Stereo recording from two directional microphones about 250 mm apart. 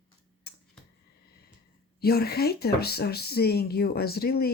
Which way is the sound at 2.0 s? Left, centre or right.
Left.